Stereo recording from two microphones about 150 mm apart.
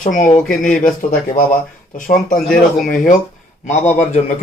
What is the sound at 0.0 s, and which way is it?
Speech, 60° left (ahead or behind).